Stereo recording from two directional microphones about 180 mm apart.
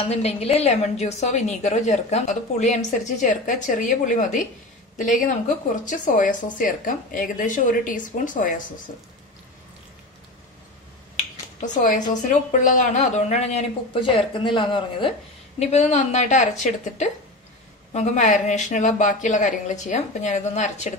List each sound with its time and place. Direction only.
0.0 s a woman's voice: 35° left (ahead or behind)
11.6 s a woman's voice: 45° left (ahead or behind); by 15.0 s 25° left (ahead or behind)
15.6 s a woman's voice: 40° left (ahead or behind)